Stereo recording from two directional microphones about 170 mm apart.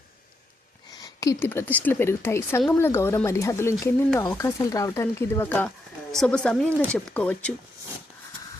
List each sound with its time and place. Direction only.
0.9 s speech: 20° left (ahead or behind)